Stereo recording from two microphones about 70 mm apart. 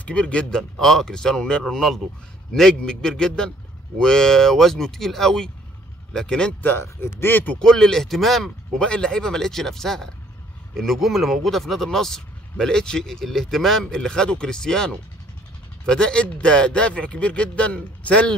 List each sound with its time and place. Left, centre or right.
0.0 s speech: centre
0.6 s speech: centre
6.6 s speech: left
7.5 s speech: centre